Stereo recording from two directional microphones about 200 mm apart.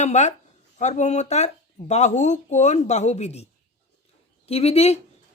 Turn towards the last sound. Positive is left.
turn(degrees=30)  # may be behind; listen again after turning